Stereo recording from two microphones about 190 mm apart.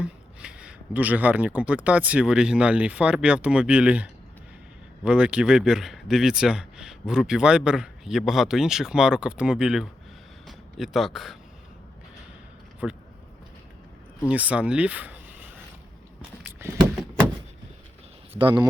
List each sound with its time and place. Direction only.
0.0 s a man's voice: 5° right (ahead or behind)
12.8 s speech: centre (ahead or behind)
14.3 s speech: 5° right (ahead or behind)
16.5 s a sound: 15° right (ahead or behind)
18.3 s speech: 25° right (ahead or behind)